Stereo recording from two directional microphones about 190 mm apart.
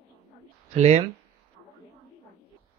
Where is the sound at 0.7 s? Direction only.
35° right (ahead or behind).